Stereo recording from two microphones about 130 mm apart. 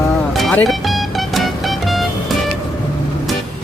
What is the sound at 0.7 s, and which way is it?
Music, centre (ahead or behind).